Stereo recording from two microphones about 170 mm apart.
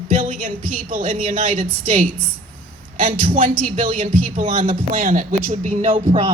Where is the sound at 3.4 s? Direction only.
50° right (ahead or behind); by 6.3 s 35° right (ahead or behind).